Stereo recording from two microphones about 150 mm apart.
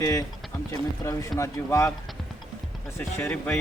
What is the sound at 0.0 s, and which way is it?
Speech, 25° left (ahead or behind).